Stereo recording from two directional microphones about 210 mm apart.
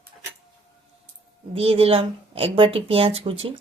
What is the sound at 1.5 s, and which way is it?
Speech, 25° right (ahead or behind).